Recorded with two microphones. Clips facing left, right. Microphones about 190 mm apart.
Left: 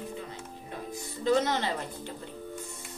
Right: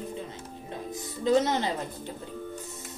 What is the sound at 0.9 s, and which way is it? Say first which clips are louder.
Music: right 2 dB; 20° right (ahead or behind).